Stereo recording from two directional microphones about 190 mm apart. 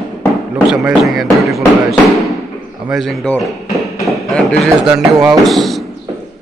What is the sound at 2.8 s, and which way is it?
A man's voice, centre (ahead or behind).